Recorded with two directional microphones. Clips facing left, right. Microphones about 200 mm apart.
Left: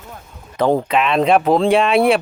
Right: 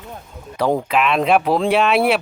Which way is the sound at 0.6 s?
Centre (ahead or behind).